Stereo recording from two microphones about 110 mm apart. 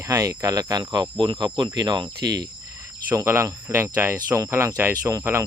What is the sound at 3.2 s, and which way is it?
Speech, 25° right (ahead or behind).